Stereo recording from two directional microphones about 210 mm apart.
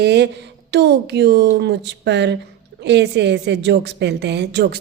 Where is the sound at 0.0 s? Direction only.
55° right (ahead or behind).